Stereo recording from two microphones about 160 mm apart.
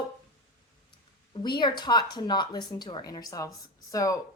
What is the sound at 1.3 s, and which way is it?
A woman's voice, 30° left (ahead or behind).